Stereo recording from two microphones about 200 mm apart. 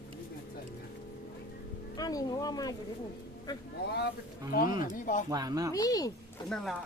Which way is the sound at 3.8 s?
55° left (ahead or behind).